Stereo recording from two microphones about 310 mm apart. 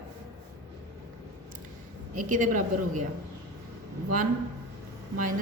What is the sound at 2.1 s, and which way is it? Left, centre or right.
Speech, right.